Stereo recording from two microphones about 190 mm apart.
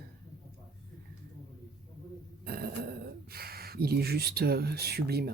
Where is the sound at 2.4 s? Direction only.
55° right (ahead or behind).